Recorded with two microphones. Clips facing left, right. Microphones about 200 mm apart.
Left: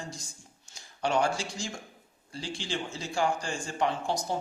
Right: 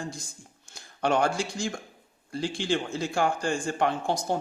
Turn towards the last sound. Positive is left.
turn(degrees=-55)  # may be behind; listen again after turning